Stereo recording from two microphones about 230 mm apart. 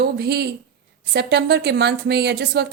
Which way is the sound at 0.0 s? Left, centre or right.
Right.